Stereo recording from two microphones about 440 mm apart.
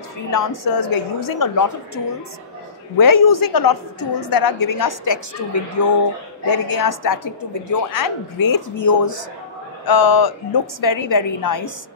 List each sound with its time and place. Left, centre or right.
0.3 s a woman's voice: left
3.0 s a woman's voice: left